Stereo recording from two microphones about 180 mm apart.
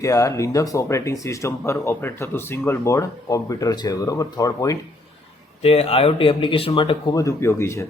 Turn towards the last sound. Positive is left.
turn(degrees=15)  # may be behind; listen again after turning